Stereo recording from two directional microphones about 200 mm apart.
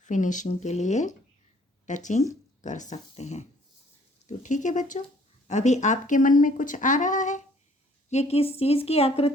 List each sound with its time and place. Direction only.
0.0 s speech: 40° left (ahead or behind)